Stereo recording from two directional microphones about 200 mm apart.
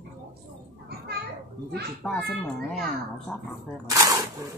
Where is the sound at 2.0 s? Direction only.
Centre (ahead or behind).